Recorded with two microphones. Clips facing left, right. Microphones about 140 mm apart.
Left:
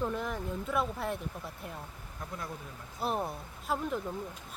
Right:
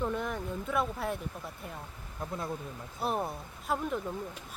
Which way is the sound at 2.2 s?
25° right (ahead or behind).